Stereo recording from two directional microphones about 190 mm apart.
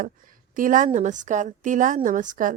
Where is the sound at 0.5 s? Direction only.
45° right (ahead or behind).